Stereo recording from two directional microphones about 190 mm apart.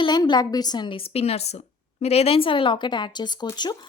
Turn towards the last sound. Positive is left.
turn(degrees=20)  # may be behind; listen again after turning